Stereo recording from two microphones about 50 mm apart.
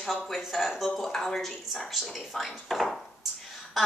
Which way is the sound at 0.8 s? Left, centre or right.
Centre.